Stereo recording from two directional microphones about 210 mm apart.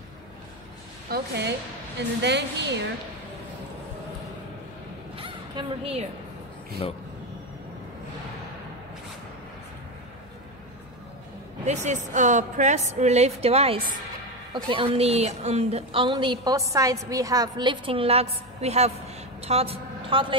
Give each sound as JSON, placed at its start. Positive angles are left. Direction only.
{"t": 1.1, "sound": "a woman's voice", "side_deg": -50}
{"t": 5.1, "sound": "a sound", "side_deg": -25}
{"t": 11.6, "sound": "a woman's voice", "side_deg": -35}